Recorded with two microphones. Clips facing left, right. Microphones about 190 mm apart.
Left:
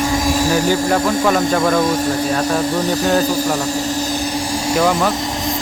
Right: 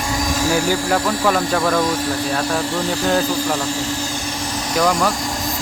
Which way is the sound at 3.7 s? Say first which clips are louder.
Left 4 dB; 40° left (ahead or behind).